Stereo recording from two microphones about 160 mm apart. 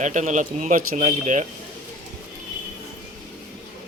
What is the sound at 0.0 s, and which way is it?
Speech, 50° right (ahead or behind).